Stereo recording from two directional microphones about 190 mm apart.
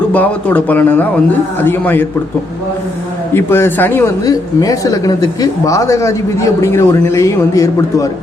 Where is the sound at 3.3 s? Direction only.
15° left (ahead or behind).